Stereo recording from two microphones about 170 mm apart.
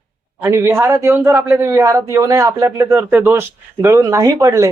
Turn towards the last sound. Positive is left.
turn(degrees=-20)  # may be behind; listen again after turning